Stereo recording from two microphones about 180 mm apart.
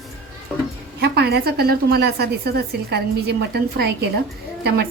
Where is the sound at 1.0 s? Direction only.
65° right (ahead or behind).